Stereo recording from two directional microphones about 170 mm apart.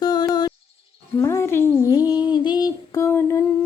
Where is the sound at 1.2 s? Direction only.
15° left (ahead or behind).